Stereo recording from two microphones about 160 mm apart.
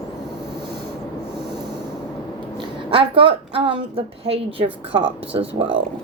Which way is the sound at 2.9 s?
35° right (ahead or behind).